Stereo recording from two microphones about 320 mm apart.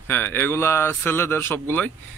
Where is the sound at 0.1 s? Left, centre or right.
Centre.